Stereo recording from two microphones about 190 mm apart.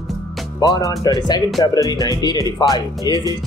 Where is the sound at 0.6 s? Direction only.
20° left (ahead or behind).